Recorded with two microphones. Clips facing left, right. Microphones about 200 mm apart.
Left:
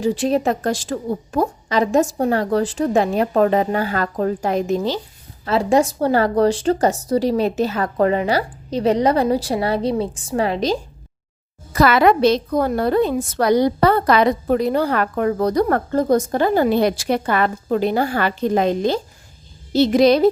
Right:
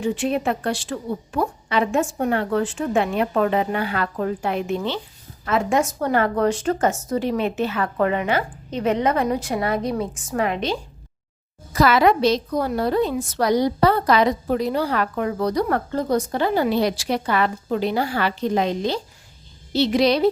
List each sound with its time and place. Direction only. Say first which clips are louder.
0.0 s a woman's voice: left 4 dB; 35° left (ahead or behind)
11.7 s a woman's voice: left 2 dB; 60° left (ahead or behind)